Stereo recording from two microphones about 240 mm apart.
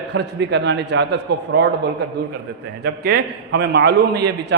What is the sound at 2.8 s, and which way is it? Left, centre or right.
A man's voice, right.